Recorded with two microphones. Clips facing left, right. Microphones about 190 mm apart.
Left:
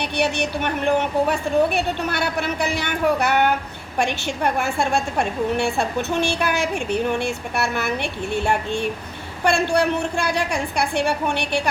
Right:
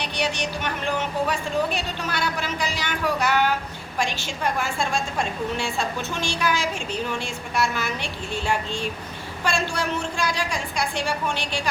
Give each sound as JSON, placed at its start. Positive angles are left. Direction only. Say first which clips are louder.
{"t": 0.0, "sound": "a woman's voice", "louder": "left 5 dB", "side_deg": 60}